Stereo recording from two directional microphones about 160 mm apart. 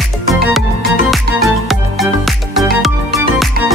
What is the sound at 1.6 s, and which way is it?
Music, centre (ahead or behind).